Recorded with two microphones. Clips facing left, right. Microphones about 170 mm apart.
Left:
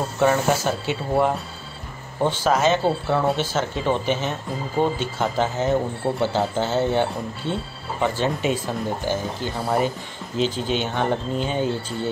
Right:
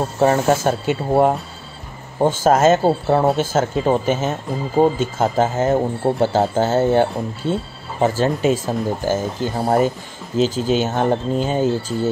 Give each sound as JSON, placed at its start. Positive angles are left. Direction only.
{"t": 0.2, "sound": "speech", "side_deg": -35}
{"t": 0.7, "sound": "speech", "side_deg": -45}